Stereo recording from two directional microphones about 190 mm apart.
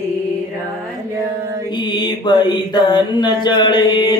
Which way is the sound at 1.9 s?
25° left (ahead or behind).